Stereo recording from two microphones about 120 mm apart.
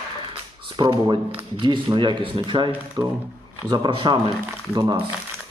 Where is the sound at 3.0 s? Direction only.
30° right (ahead or behind).